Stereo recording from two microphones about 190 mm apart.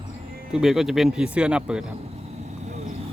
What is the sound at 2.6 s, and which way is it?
Vehicle, 35° right (ahead or behind).